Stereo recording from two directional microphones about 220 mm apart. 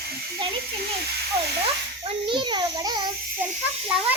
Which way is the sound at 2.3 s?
20° right (ahead or behind).